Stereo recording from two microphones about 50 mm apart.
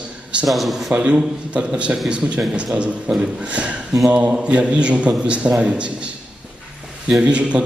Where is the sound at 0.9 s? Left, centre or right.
Right.